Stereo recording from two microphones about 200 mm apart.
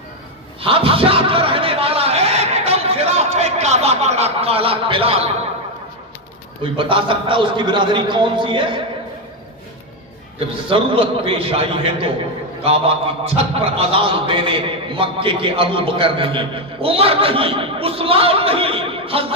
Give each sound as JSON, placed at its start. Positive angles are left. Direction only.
{"t": 0.6, "sound": "a sound", "side_deg": -25}
{"t": 6.6, "sound": "a man's voice", "side_deg": -25}
{"t": 10.7, "sound": "a man's voice", "side_deg": -25}